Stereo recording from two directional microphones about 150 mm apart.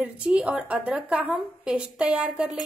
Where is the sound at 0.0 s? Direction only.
10° right (ahead or behind).